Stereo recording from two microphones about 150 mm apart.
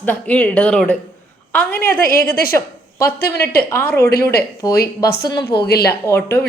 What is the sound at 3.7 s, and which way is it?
Speech, 15° left (ahead or behind).